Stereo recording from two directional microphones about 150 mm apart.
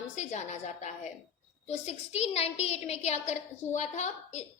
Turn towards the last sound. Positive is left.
turn(degrees=50)  # may be behind; listen again after turning